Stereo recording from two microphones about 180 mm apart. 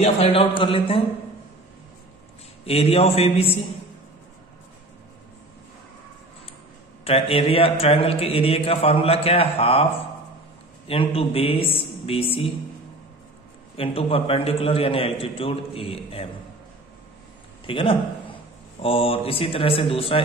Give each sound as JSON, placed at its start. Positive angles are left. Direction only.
{"t": 0.0, "sound": "speech", "side_deg": 35}
{"t": 2.6, "sound": "speech", "side_deg": 35}
{"t": 7.1, "sound": "speech", "side_deg": 30}
{"t": 10.9, "sound": "speech", "side_deg": 30}
{"t": 13.7, "sound": "speech", "side_deg": 30}
{"t": 17.6, "sound": "speech", "side_deg": 30}